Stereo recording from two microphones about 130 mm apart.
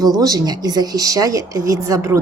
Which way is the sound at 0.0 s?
30° right (ahead or behind).